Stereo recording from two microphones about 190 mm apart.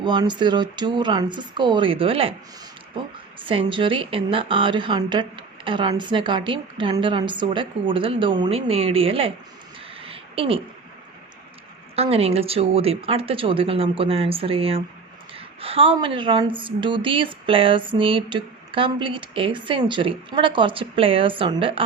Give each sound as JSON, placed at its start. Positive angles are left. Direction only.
{"t": 0.0, "sound": "a woman's voice", "side_deg": -25}
{"t": 3.4, "sound": "a woman's voice", "side_deg": -25}
{"t": 10.0, "sound": "a sound", "side_deg": -30}
{"t": 11.9, "sound": "a woman's voice", "side_deg": -30}